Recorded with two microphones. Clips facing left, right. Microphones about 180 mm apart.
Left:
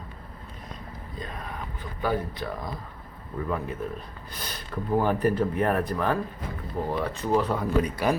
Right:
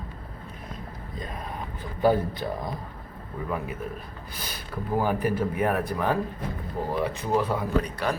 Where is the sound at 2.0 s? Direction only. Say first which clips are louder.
Right 5 dB; 30° right (ahead or behind).